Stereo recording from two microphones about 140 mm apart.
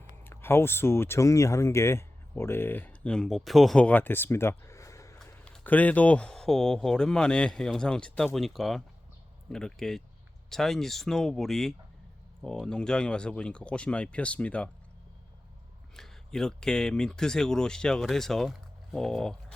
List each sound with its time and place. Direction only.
0.3 s speech: 15° left (ahead or behind)
16.0 s speech: 5° left (ahead or behind)